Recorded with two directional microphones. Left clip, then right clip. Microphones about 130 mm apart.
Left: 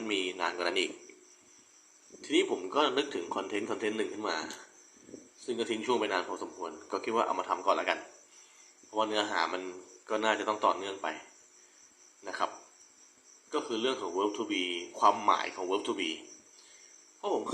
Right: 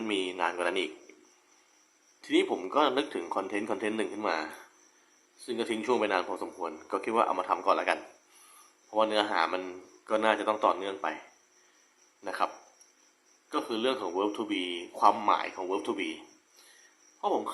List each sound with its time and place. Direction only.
0.1 s speech: 20° right (ahead or behind)
2.2 s speech: 25° right (ahead or behind)
12.2 s speech: 20° right (ahead or behind)
13.5 s a man's voice: 25° right (ahead or behind)